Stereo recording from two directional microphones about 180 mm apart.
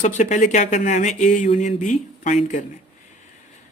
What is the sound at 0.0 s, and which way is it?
Speech, 40° left (ahead or behind).